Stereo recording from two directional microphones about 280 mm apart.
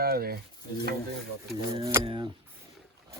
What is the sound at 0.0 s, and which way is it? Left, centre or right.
Speech, right.